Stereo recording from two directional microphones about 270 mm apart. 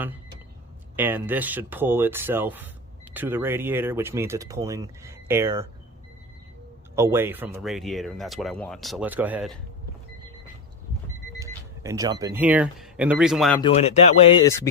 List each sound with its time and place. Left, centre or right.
0.9 s speech: centre
6.9 s speech: centre
11.3 s speech: centre
13.6 s speech: left